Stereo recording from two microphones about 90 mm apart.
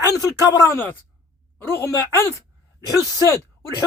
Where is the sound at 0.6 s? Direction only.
30° left (ahead or behind).